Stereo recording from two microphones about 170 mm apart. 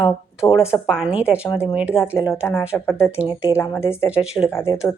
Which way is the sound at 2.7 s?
15° left (ahead or behind).